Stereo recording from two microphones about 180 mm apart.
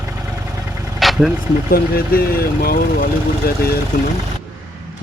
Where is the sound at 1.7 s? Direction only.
55° left (ahead or behind).